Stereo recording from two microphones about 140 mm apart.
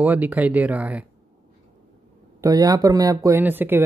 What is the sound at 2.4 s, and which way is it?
Speech, 25° right (ahead or behind).